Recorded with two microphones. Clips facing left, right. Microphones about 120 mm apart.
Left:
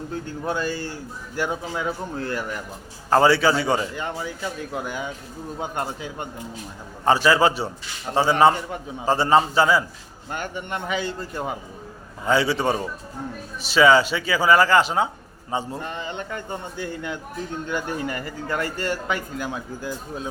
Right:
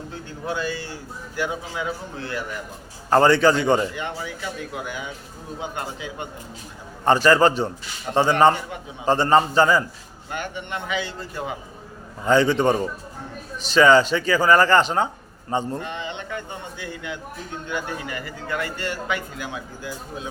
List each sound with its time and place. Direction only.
0.1 s a man's voice: 40° left (ahead or behind)
2.1 s a man's voice: 45° left (ahead or behind)
3.1 s a man's voice: 10° left (ahead or behind)
4.7 s a man's voice: 40° left (ahead or behind)
7.0 s speech: 5° left (ahead or behind)
10.3 s a man's voice: 45° left (ahead or behind)
12.3 s speech: 10° left (ahead or behind)
15.8 s a man's voice: 40° left (ahead or behind)